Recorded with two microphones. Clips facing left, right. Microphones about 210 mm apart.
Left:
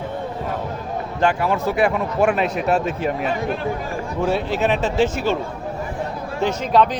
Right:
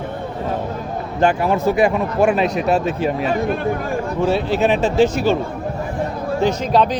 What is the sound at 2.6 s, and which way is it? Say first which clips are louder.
Speech: right 2 dB; 35° right (ahead or behind).